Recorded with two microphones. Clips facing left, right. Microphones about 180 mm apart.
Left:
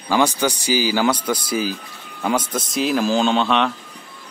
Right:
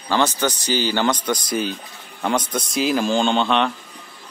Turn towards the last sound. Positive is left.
turn(degrees=0)  # may be behind; listen again after turning